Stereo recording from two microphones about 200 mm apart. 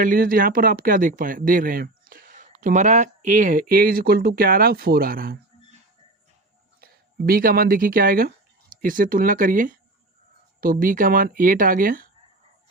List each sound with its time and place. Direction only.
0.0 s speech: 45° right (ahead or behind)
6.8 s speech: 50° right (ahead or behind)